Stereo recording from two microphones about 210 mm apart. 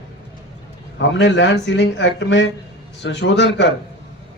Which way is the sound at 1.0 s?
55° left (ahead or behind).